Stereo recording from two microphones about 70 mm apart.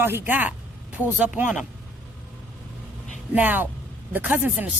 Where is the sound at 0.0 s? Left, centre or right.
Right.